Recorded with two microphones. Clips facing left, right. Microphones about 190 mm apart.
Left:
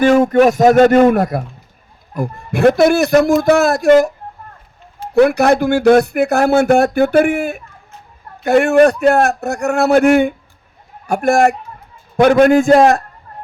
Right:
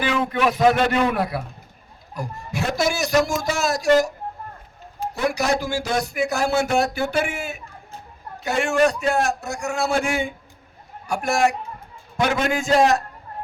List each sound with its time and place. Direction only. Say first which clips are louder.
0.0 s a man's voice: left 11 dB; 45° left (ahead or behind)
5.1 s a man's voice: left 12 dB; 60° left (ahead or behind)